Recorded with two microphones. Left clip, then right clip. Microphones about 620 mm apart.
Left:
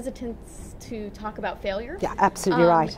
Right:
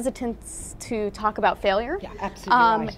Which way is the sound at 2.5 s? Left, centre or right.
Right.